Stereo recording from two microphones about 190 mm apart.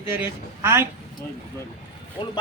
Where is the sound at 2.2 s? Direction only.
25° left (ahead or behind).